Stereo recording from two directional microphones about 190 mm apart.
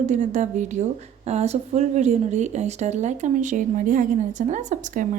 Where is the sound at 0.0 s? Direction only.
40° right (ahead or behind).